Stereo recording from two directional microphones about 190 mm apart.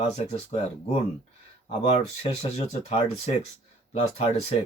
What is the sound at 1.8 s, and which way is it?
Speech, 35° left (ahead or behind).